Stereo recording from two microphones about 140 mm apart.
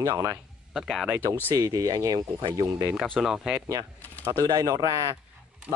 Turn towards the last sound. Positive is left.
turn(degrees=-25)  # may be behind; listen again after turning